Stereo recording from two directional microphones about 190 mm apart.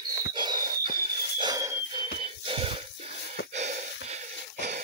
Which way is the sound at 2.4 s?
30° right (ahead or behind).